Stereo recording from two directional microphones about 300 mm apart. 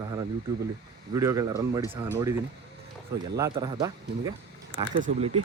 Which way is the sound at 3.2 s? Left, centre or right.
Centre.